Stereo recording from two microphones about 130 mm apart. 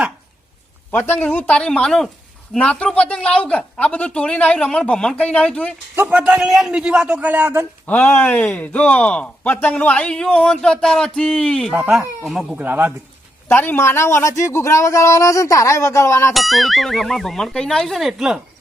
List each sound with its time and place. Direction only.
0.9 s speech: 15° left (ahead or behind)
6.0 s a man's voice: 10° right (ahead or behind)
7.9 s speech: 10° left (ahead or behind)
11.7 s a man's voice: 15° right (ahead or behind)
12.2 s a man's voice: centre (ahead or behind)
13.5 s a man's voice: 15° left (ahead or behind)
16.3 s speech: centre (ahead or behind)